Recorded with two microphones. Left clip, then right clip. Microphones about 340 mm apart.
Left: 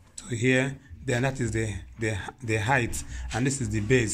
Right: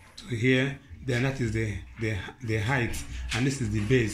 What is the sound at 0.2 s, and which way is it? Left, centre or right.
Speech, left.